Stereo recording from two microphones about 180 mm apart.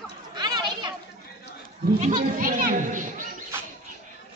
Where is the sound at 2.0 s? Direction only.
40° right (ahead or behind).